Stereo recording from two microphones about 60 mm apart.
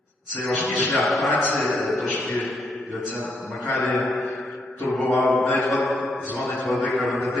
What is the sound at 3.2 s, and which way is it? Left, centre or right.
Speech, centre.